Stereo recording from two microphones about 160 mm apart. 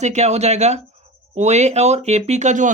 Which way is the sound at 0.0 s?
45° right (ahead or behind).